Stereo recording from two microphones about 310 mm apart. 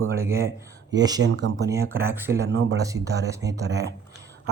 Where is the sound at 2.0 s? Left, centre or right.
Centre.